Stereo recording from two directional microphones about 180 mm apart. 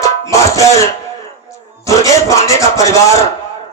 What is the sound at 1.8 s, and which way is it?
A man's voice, 20° left (ahead or behind).